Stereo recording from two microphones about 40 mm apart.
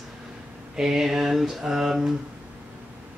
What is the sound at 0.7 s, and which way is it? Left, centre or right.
A woman's voice, centre.